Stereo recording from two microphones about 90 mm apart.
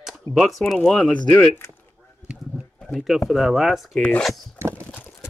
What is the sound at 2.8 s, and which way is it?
Speech, centre (ahead or behind).